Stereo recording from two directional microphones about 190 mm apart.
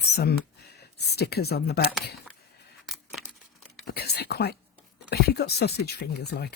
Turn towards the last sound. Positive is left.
turn(degrees=60)  # may be behind; listen again after turning